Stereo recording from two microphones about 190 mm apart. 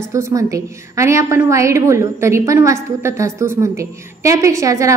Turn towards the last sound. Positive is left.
turn(degrees=-15)  # may be behind; listen again after turning